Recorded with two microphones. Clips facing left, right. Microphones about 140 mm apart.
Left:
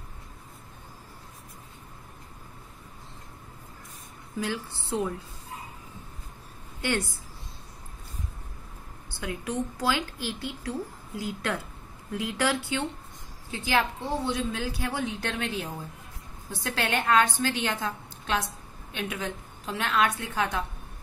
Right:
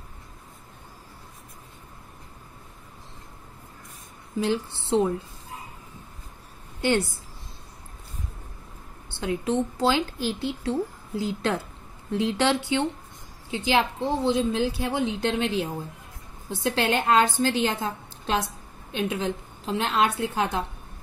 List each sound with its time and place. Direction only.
4.4 s a woman's voice: 25° right (ahead or behind)
9.2 s a woman's voice: 25° right (ahead or behind)